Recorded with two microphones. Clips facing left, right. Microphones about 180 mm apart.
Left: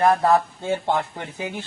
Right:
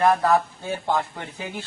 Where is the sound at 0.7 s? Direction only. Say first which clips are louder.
Left 2 dB; 20° left (ahead or behind).